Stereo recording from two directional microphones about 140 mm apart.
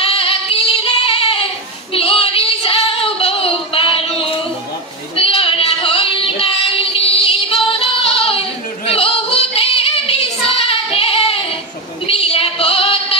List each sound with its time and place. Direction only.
0.0 s female singing: 45° left (ahead or behind)
5.1 s child singing: 40° left (ahead or behind)
8.8 s female singing: 45° left (ahead or behind)